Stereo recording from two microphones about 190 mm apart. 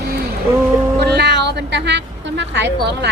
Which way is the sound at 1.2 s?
65° right (ahead or behind).